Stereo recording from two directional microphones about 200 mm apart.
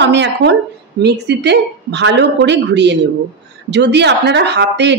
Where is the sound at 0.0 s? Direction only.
60° right (ahead or behind).